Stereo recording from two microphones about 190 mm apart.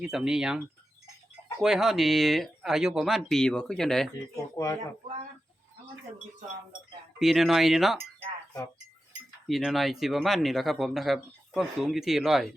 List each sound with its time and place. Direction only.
0.0 s speech: 5° right (ahead or behind)
1.6 s speech: centre (ahead or behind)
4.5 s speech: 15° left (ahead or behind)
7.2 s speech: centre (ahead or behind)
9.5 s speech: centre (ahead or behind)